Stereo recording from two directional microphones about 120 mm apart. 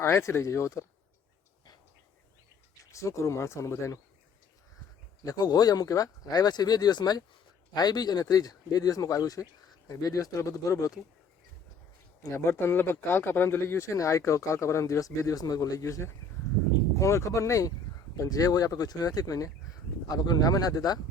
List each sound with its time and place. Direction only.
0.0 s speech: 20° left (ahead or behind)
2.9 s speech: 25° left (ahead or behind)
5.2 s speech: 30° left (ahead or behind)
12.2 s speech: 20° left (ahead or behind)